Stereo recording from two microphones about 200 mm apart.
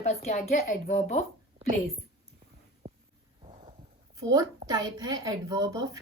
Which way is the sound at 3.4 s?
30° right (ahead or behind).